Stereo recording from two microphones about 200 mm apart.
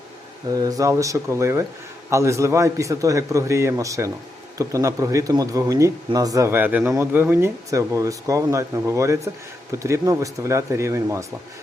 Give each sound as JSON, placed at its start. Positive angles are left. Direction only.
{"t": 0.5, "sound": "speech", "side_deg": -20}